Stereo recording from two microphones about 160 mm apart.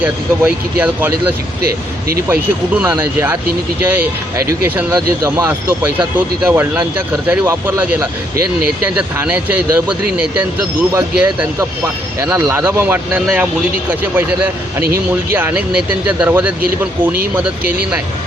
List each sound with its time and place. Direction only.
0.0 s speech: 10° right (ahead or behind)
2.1 s speech: 15° right (ahead or behind)